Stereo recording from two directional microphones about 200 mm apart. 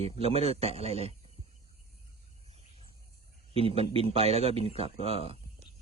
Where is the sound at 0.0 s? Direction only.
30° right (ahead or behind).